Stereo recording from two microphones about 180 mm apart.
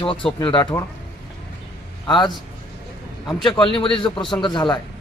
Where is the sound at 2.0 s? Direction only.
25° left (ahead or behind).